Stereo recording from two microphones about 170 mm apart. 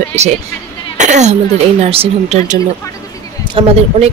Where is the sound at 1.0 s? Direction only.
45° right (ahead or behind).